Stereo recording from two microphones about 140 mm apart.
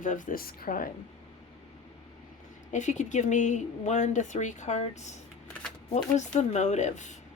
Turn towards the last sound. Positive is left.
turn(degrees=55)  # may be behind; listen again after turning